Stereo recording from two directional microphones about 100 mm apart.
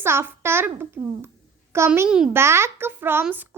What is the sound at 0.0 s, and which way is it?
Speech, 25° right (ahead or behind).